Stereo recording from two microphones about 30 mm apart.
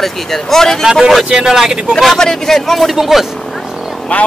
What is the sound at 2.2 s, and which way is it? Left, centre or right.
Speech, centre.